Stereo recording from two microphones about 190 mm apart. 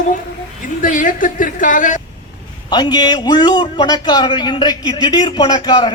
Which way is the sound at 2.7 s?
25° left (ahead or behind).